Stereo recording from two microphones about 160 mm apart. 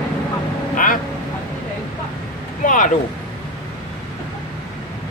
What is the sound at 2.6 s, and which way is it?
Vehicle, 55° left (ahead or behind).